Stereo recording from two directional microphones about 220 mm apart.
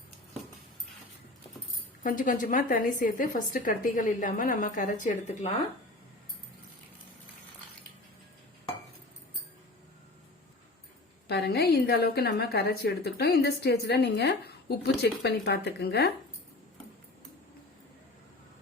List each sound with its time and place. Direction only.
2.0 s a woman's voice: 40° left (ahead or behind)
11.3 s a woman's voice: 50° left (ahead or behind)